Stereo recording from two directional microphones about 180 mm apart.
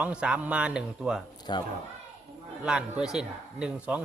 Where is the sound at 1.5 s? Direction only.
25° left (ahead or behind).